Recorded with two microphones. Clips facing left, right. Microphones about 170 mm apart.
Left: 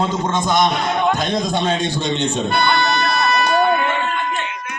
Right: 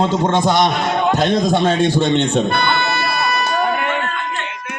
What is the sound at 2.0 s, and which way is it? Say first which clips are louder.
Speech: right 5 dB; 60° right (ahead or behind).